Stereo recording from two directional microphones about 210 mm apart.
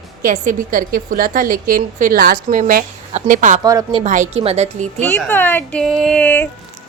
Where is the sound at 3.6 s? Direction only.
20° right (ahead or behind).